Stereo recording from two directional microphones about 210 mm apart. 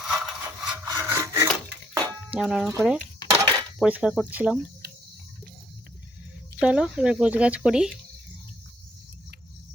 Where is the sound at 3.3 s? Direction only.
15° right (ahead or behind).